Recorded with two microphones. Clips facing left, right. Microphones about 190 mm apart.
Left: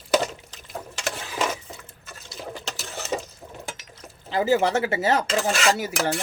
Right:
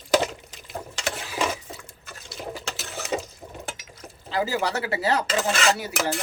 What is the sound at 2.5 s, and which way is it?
Water, 5° right (ahead or behind).